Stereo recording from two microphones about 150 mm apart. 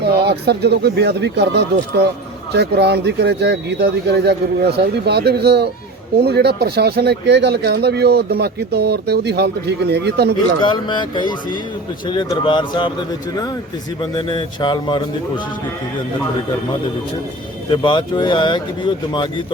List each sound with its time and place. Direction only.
0.0 s speech: 90° right
2.5 s speech: 90° right
10.6 s speech: 30° left (ahead or behind)
14.0 s speech: 30° left (ahead or behind)
17.7 s speech: 30° left (ahead or behind)